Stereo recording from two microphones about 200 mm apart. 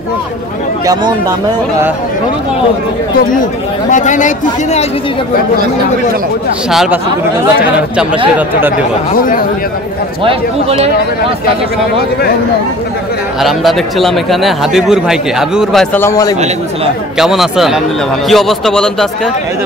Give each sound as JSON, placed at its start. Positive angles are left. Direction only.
{"t": 3.9, "sound": "a man's voice", "side_deg": 40}
{"t": 6.7, "sound": "speech", "side_deg": 0}
{"t": 8.4, "sound": "speech", "side_deg": -10}
{"t": 9.1, "sound": "speech", "side_deg": 45}
{"t": 13.4, "sound": "speech", "side_deg": 0}
{"t": 17.2, "sound": "speech", "side_deg": 0}